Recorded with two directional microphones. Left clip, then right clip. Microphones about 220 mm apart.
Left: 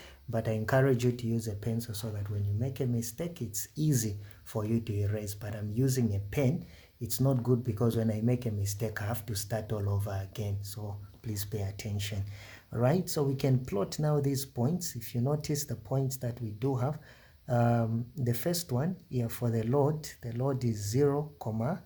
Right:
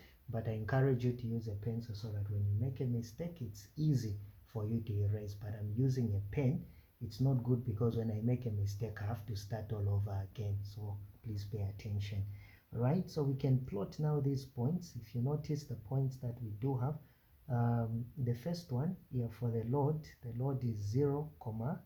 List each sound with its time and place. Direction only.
0.3 s speech: 35° left (ahead or behind)